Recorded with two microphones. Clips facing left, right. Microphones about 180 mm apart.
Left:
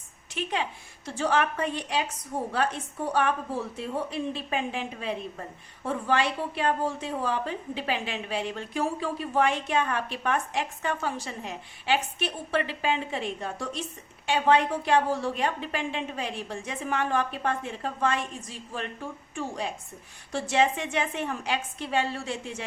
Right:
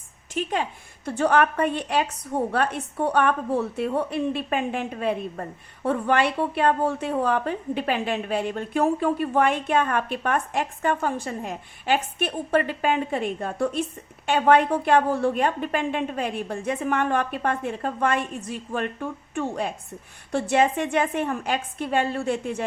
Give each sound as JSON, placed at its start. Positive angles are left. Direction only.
{"t": 0.3, "sound": "a woman's voice", "side_deg": -45}